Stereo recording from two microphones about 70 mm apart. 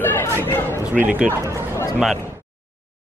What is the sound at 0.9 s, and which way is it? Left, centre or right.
Speech, right.